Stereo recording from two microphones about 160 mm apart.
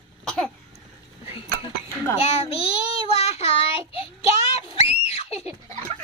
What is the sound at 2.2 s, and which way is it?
Child singing, 40° left (ahead or behind).